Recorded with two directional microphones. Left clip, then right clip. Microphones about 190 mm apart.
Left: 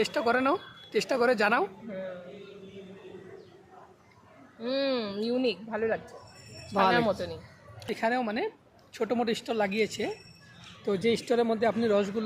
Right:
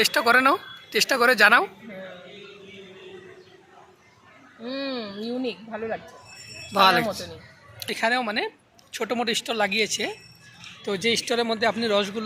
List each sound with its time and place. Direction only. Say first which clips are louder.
0.0 s a man's voice: right 8 dB; centre (ahead or behind)
4.6 s a woman's voice: left 2 dB; 30° left (ahead or behind)
5.0 s speech: left 1 dB; 10° left (ahead or behind)
5.3 s a woman's voice: left 1 dB; 20° left (ahead or behind)
6.7 s a man's voice: right 5 dB; centre (ahead or behind)